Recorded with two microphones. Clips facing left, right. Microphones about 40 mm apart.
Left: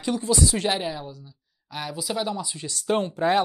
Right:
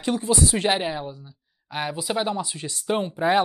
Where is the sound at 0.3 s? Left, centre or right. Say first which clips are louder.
Right 2 dB; right.